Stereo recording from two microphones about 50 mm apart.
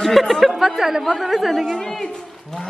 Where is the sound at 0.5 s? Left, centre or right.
Centre.